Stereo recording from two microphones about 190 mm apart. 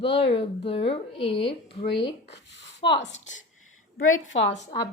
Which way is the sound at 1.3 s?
65° left (ahead or behind).